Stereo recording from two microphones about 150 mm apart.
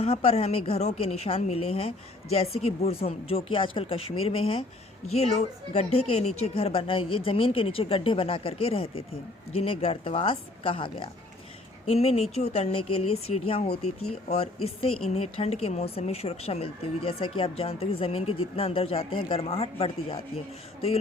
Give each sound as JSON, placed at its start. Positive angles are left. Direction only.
{"t": 0.0, "sound": "speech", "side_deg": 40}